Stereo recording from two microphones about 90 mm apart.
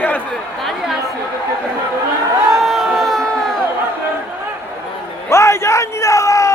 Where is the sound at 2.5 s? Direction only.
Centre (ahead or behind).